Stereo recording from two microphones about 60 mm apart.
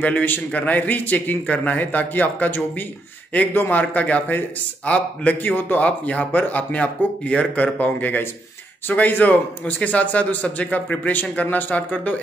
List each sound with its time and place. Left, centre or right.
0.0 s a man's voice: left